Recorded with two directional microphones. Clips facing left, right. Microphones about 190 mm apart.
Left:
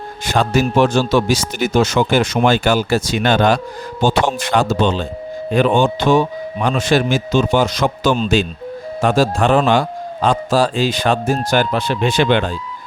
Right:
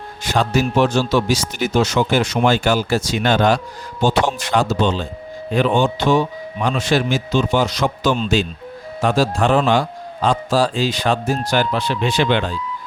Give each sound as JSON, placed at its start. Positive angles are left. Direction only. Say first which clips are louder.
{"t": 0.3, "sound": "a man's voice", "louder": "left 2 dB", "side_deg": 50}